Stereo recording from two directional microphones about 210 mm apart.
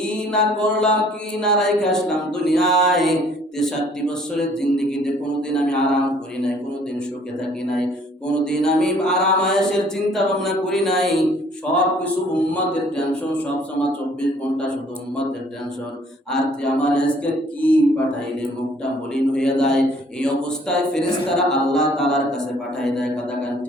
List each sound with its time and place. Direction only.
0.0 s speech: 5° left (ahead or behind)
8.3 s speech: 5° left (ahead or behind)
14.2 s speech: 5° left (ahead or behind)
16.3 s speech: 5° left (ahead or behind)
19.1 s speech: 5° left (ahead or behind)